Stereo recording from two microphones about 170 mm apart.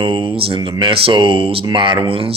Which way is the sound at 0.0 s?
30° right (ahead or behind).